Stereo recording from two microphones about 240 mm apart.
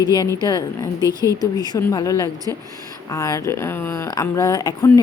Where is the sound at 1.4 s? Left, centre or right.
Centre.